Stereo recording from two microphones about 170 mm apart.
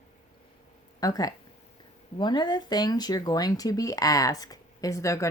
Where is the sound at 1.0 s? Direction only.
20° left (ahead or behind).